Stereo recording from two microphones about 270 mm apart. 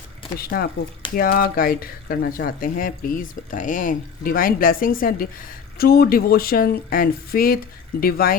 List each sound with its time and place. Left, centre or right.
0.3 s speech: left